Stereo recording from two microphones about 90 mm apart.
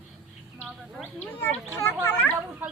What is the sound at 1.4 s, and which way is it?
Speech, 25° left (ahead or behind).